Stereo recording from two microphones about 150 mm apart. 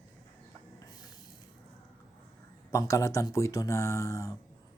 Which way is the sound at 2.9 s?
20° left (ahead or behind).